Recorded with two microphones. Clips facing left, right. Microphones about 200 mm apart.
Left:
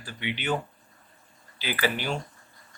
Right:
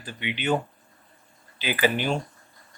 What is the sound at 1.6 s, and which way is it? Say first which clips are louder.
Speech: right 4 dB; 20° right (ahead or behind).